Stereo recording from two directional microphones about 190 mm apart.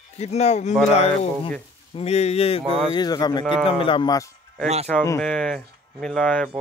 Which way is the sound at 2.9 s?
20° left (ahead or behind).